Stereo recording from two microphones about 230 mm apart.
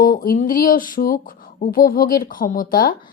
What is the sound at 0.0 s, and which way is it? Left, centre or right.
Speech, left.